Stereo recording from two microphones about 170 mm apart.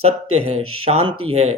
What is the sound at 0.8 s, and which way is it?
Speech, 35° right (ahead or behind).